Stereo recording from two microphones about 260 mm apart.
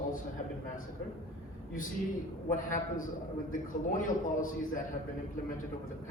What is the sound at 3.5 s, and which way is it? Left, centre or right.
A man's voice, left.